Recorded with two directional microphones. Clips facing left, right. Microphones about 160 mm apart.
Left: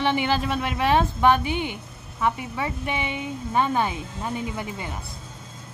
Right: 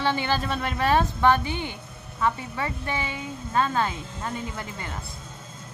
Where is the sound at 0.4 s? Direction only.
5° left (ahead or behind).